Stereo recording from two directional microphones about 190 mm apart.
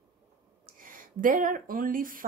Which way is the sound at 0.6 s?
45° right (ahead or behind).